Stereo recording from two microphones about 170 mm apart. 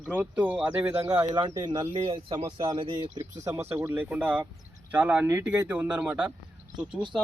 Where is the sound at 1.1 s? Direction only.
25° right (ahead or behind).